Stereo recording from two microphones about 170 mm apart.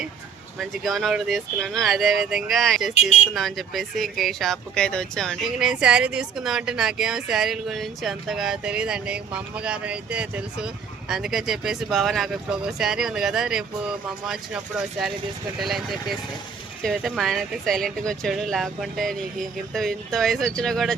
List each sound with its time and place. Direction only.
0.6 s speech: centre (ahead or behind)
2.9 s speech: 40° left (ahead or behind)
3.3 s speech: centre (ahead or behind)